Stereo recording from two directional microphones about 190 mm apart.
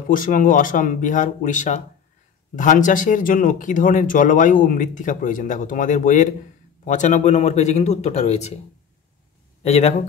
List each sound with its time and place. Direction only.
0.1 s speech: 45° left (ahead or behind)
9.6 s speech: 35° left (ahead or behind)